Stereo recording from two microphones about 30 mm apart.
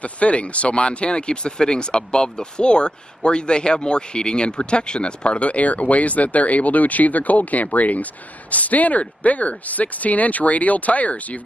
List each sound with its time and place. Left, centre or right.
0.0 s speech: left